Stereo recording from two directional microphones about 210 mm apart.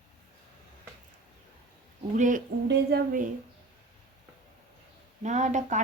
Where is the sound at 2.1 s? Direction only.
35° right (ahead or behind).